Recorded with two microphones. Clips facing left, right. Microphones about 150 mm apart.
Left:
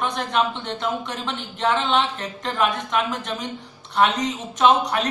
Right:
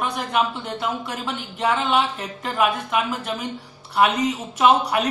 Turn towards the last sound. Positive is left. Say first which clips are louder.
# right 1 dB
turn(degrees=-10)  # may be behind; listen again after turning